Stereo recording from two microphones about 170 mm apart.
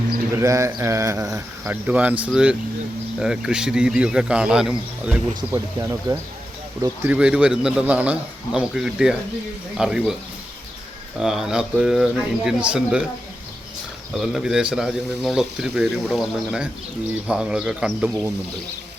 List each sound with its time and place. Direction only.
0.3 s speech: 15° right (ahead or behind)
5.3 s speech: 15° right (ahead or behind)
7.1 s speech: 5° right (ahead or behind)
11.2 s speech: centre (ahead or behind)
14.1 s speech: centre (ahead or behind)